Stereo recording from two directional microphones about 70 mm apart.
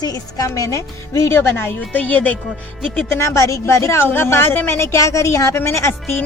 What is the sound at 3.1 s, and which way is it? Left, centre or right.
Speech, left.